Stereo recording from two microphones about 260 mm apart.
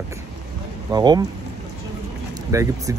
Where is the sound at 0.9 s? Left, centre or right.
Centre.